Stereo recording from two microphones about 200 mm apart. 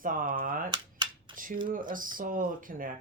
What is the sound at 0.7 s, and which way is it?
Cap gun, 20° right (ahead or behind).